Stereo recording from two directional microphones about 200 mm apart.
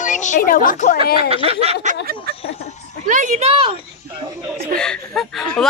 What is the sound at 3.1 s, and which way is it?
Speech, 40° right (ahead or behind).